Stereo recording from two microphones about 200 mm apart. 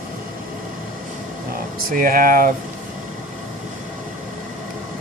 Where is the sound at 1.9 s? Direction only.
45° right (ahead or behind).